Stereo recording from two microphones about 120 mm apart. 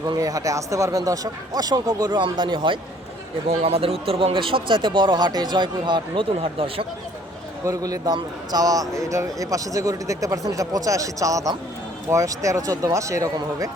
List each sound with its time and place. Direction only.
0.0 s speech: 30° right (ahead or behind)
3.6 s speech: 55° right (ahead or behind)
7.6 s speech: 30° right (ahead or behind)